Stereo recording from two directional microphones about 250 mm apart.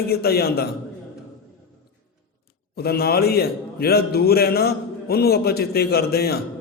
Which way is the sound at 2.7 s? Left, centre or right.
Left.